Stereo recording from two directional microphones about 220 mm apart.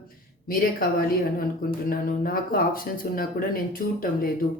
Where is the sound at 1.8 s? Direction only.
40° left (ahead or behind).